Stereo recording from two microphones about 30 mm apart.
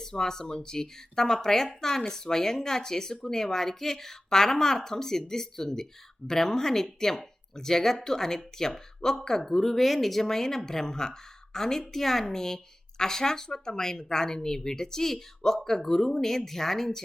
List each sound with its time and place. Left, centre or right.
0.0 s a woman's voice: centre